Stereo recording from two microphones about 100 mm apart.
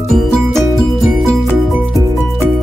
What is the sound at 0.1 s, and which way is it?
Music, centre (ahead or behind).